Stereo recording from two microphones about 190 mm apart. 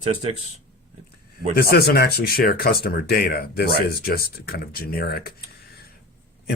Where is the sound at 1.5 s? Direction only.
55° left (ahead or behind).